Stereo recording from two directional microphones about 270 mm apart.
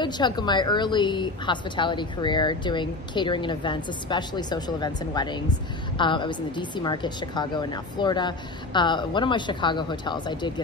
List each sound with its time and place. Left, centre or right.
0.0 s a woman's voice: centre